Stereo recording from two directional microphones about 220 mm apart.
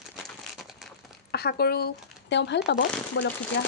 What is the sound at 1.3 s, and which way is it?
Speech, 45° left (ahead or behind).